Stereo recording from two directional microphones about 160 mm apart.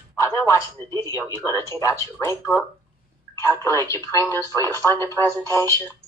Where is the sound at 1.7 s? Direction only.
20° left (ahead or behind).